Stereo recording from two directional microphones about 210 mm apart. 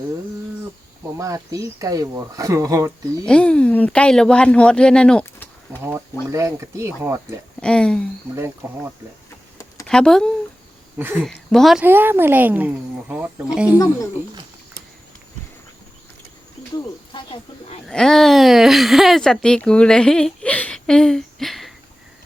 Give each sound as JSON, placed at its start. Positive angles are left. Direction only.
{"t": 1.2, "sound": "speech", "side_deg": -15}
{"t": 3.2, "sound": "speech", "side_deg": 5}
{"t": 6.3, "sound": "speech", "side_deg": -15}
{"t": 7.6, "sound": "speech", "side_deg": 5}
{"t": 8.4, "sound": "speech", "side_deg": -10}
{"t": 9.8, "sound": "speech", "side_deg": 5}
{"t": 10.9, "sound": "speech", "side_deg": -10}
{"t": 11.3, "sound": "speech", "side_deg": 0}
{"t": 13.7, "sound": "speech", "side_deg": 15}
{"t": 17.1, "sound": "speech", "side_deg": 20}
{"t": 17.8, "sound": "speech", "side_deg": 0}